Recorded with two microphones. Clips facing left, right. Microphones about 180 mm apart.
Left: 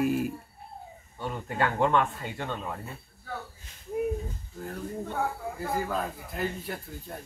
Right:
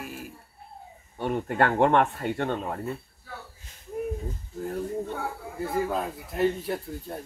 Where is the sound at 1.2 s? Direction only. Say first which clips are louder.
Right 5 dB; 60° right (ahead or behind).